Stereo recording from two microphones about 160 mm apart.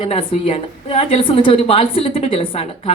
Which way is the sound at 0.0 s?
35° left (ahead or behind).